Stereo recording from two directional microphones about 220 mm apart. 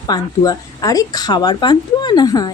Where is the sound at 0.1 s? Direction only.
15° left (ahead or behind).